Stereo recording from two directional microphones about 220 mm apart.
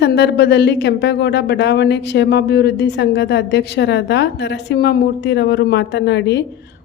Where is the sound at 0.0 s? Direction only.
50° left (ahead or behind).